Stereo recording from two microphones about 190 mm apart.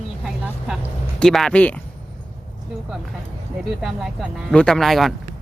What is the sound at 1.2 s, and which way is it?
Speech, 5° left (ahead or behind).